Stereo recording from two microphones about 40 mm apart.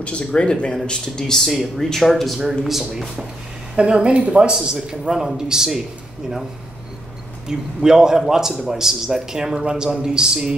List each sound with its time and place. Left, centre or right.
0.0 s speech: left; by 1.5 s centre
1.5 s a man's voice: centre
3.7 s a man's voice: right
7.4 s a man's voice: centre